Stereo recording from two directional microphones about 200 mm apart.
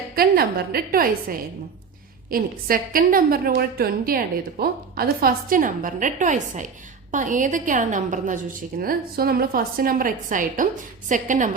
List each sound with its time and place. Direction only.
0.2 s a woman's voice: 50° right (ahead or behind)